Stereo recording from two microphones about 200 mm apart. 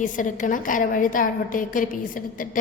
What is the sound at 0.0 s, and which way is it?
A woman's voice, 40° left (ahead or behind).